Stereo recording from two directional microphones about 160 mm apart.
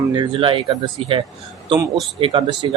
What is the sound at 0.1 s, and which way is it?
Speech, 30° right (ahead or behind).